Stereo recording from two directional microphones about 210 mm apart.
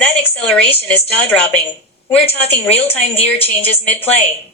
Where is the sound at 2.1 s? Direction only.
30° left (ahead or behind).